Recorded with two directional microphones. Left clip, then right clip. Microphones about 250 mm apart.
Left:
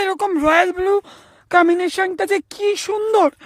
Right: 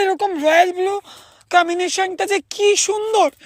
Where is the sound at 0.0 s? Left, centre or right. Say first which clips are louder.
Right 2 dB; centre.